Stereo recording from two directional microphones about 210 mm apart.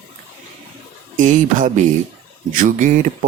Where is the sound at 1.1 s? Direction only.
35° right (ahead or behind).